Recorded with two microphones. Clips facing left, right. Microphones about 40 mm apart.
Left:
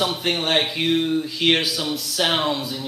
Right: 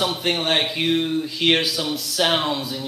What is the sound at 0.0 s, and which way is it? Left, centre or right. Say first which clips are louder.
Speech: even; centre.